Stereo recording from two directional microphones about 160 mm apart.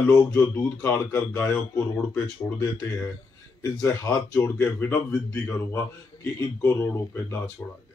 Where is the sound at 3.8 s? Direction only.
15° left (ahead or behind).